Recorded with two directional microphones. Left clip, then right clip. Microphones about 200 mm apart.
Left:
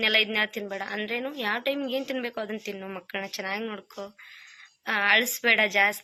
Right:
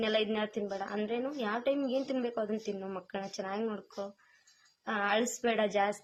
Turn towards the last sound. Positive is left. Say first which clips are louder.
# left 8 dB
turn(degrees=5)  # may be behind; listen again after turning